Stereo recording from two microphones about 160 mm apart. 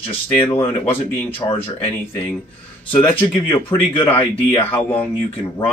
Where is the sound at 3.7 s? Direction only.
30° left (ahead or behind).